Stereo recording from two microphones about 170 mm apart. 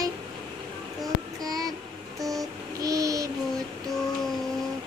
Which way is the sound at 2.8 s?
20° right (ahead or behind).